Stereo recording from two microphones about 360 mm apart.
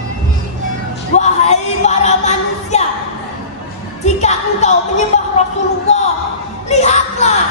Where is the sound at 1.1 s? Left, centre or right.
Centre.